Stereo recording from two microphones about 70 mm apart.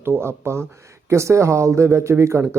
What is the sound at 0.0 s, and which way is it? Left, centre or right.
Speech, right.